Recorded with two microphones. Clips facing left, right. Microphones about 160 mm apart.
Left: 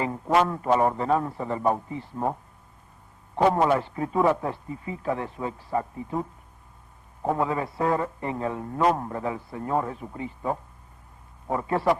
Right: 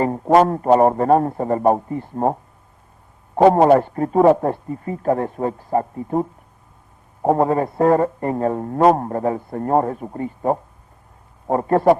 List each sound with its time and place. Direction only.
0.0 s a man's voice: 45° right (ahead or behind)